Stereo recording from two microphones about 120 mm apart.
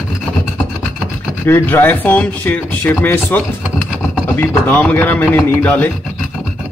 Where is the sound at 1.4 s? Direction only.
15° left (ahead or behind).